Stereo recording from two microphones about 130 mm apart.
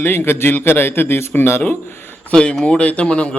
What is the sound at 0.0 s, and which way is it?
A man's voice, 15° left (ahead or behind).